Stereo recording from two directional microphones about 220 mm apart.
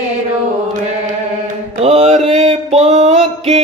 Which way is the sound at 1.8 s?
25° right (ahead or behind).